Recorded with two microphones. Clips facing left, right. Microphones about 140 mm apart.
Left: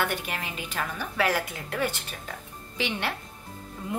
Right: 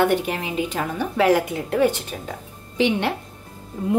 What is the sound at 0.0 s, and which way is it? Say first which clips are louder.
A woman's voice: right 10 dB; 15° right (ahead or behind).